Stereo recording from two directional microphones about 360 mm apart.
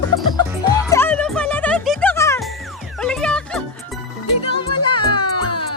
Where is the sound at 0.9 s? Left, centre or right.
Centre.